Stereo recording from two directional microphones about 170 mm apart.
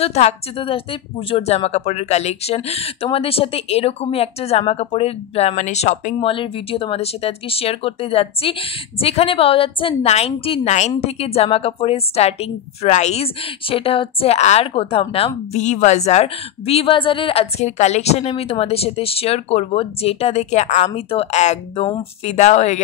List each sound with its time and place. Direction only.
0.0 s a woman's voice: 40° left (ahead or behind)
6.1 s a woman's voice: 30° left (ahead or behind)